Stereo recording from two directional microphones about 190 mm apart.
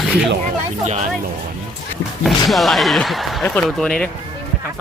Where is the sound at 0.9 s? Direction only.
35° right (ahead or behind).